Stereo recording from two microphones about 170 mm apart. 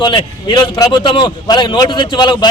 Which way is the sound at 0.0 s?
25° left (ahead or behind).